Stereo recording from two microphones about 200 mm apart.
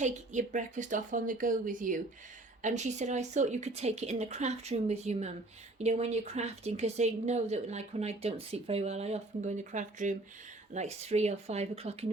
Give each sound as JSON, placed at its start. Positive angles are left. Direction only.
{"t": 0.0, "sound": "speech", "side_deg": -40}